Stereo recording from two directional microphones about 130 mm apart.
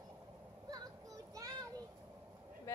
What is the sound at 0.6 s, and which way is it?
Music, 30° right (ahead or behind).